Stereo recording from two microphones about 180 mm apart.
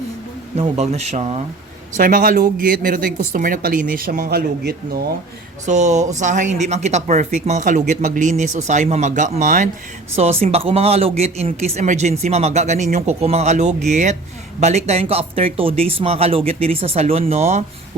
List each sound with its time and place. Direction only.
0.5 s speech: 35° right (ahead or behind)
2.0 s speech: 50° right (ahead or behind)
5.6 s speech: 40° right (ahead or behind)